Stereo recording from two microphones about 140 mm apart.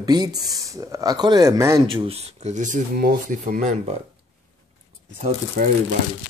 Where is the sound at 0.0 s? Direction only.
30° right (ahead or behind).